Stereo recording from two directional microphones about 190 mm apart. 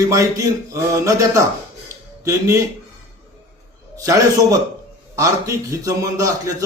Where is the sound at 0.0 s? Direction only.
15° right (ahead or behind).